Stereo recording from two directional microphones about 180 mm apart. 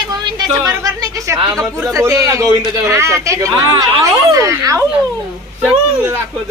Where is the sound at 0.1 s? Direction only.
25° right (ahead or behind).